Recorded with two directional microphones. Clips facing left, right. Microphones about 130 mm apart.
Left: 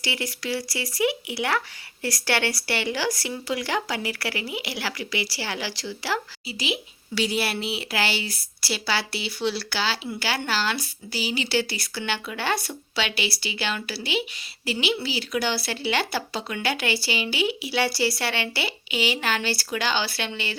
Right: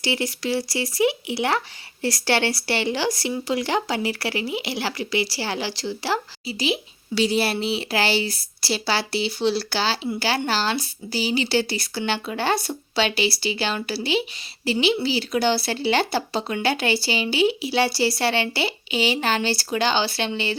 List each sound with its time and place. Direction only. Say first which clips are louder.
0.0 s a woman's voice: right 5 dB; 30° right (ahead or behind)